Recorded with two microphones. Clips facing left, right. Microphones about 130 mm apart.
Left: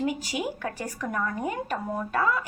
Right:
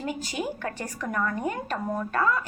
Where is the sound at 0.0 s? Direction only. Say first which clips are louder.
Left 2 dB; 10° left (ahead or behind).